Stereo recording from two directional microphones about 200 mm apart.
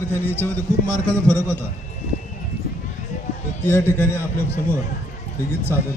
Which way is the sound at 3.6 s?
10° left (ahead or behind).